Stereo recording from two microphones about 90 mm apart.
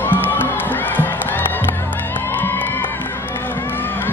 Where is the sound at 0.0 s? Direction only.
20° left (ahead or behind).